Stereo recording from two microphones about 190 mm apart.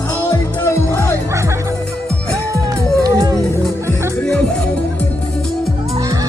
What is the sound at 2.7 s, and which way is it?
Music, 20° right (ahead or behind).